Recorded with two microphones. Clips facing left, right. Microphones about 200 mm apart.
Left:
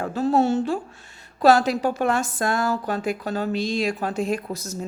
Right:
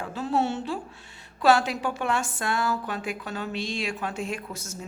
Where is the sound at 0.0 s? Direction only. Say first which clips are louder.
Left 6 dB; 40° left (ahead or behind).